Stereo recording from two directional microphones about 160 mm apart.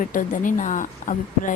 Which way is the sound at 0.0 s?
55° left (ahead or behind).